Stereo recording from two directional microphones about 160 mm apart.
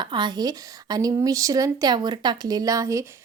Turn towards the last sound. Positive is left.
turn(degrees=-20)  # may be behind; listen again after turning